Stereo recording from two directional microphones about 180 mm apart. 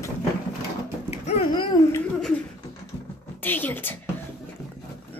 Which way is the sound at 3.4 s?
10° left (ahead or behind).